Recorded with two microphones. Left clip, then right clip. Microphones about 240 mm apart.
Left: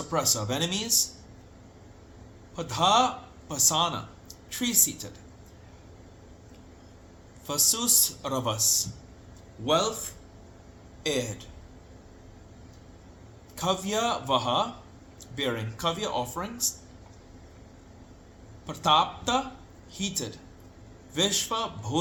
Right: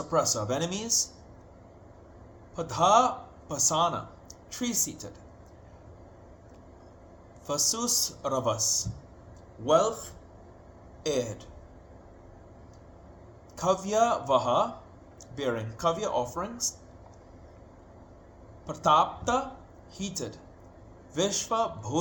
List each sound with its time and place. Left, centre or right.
0.1 s speech: centre
2.6 s speech: centre
7.4 s a man's voice: centre
11.0 s speech: centre
13.6 s speech: centre
18.6 s speech: centre